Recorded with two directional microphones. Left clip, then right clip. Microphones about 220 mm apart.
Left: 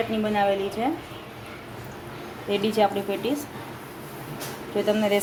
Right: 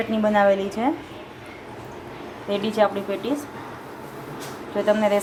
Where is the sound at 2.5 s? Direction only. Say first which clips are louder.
Right 1 dB; centre (ahead or behind).